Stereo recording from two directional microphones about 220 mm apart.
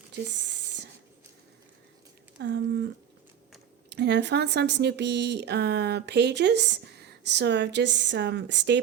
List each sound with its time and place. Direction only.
2.4 s speech: 50° right (ahead or behind)
3.8 s speech: 50° right (ahead or behind)